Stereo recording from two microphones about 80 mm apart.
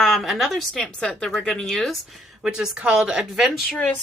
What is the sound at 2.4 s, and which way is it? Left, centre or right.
Speech, centre.